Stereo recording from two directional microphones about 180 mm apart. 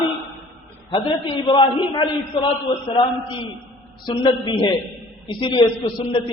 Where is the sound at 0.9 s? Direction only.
25° left (ahead or behind).